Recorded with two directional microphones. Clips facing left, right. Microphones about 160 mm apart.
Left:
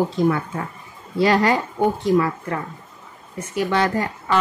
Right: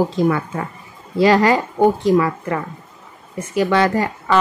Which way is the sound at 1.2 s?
90° right.